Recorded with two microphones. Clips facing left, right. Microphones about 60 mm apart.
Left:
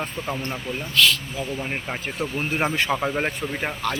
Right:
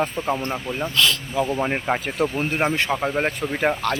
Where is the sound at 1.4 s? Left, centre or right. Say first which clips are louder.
Right 6 dB; right.